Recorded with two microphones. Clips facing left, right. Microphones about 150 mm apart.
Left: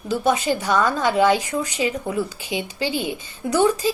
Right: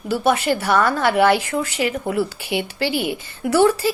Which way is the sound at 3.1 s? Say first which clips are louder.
Right 3 dB; 15° left (ahead or behind).